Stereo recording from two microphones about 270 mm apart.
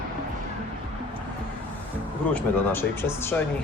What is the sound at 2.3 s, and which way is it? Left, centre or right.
Speech, centre.